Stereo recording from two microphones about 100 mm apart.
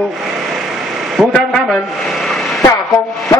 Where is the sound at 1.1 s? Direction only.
5° left (ahead or behind).